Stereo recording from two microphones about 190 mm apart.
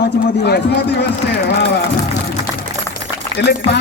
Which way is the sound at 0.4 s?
60° left (ahead or behind).